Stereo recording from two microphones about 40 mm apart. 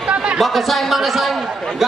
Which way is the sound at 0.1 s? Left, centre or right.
Right.